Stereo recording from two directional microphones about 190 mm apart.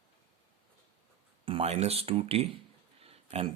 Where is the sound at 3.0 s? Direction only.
30° right (ahead or behind).